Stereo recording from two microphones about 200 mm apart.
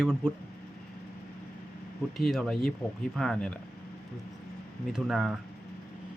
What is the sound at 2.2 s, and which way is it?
Speech, centre (ahead or behind).